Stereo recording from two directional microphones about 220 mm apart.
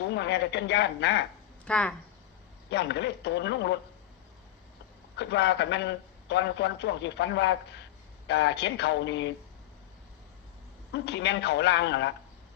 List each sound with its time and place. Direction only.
0.0 s a man's voice: 50° left (ahead or behind)
1.6 s speech: 5° left (ahead or behind)
2.6 s a man's voice: 50° left (ahead or behind)
5.1 s a man's voice: 50° left (ahead or behind)
10.9 s a man's voice: 50° left (ahead or behind)